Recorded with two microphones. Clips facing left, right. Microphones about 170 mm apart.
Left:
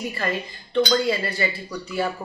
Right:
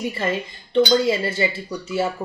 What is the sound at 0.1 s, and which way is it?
Speech, 25° right (ahead or behind).